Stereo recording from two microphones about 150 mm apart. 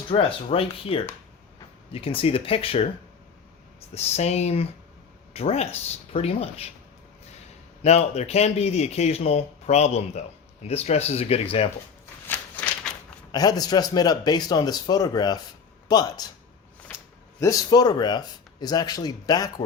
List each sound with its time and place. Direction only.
0.1 s speech: 35° left (ahead or behind)
3.9 s speech: 45° left (ahead or behind)
7.8 s speech: 45° left (ahead or behind)
12.3 s a sound: 10° left (ahead or behind)
13.3 s speech: 25° left (ahead or behind)
17.4 s speech: 25° left (ahead or behind)